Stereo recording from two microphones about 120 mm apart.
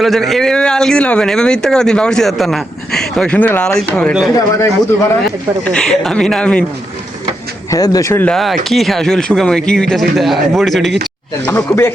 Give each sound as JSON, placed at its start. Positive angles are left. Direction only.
{"t": 0.0, "sound": "speech", "side_deg": 0}
{"t": 4.4, "sound": "speech", "side_deg": 25}
{"t": 5.6, "sound": "speech", "side_deg": 5}
{"t": 7.7, "sound": "speech", "side_deg": 30}
{"t": 8.1, "sound": "speech", "side_deg": 15}
{"t": 8.4, "sound": "speech", "side_deg": 0}
{"t": 11.4, "sound": "speech", "side_deg": 20}